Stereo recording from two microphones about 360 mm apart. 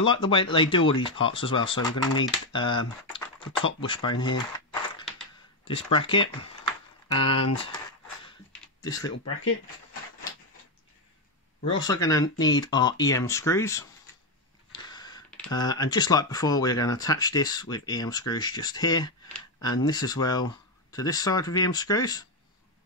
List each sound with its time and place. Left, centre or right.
0.0 s speech: centre
5.7 s speech: centre
8.8 s speech: centre
11.6 s speech: centre